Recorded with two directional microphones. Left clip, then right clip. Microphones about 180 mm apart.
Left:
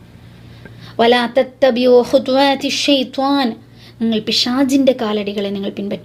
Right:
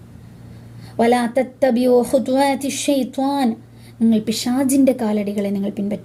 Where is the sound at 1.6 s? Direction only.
5° right (ahead or behind).